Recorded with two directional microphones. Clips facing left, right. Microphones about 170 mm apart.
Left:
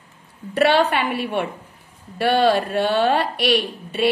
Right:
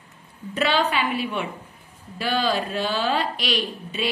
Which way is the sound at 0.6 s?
60° left (ahead or behind).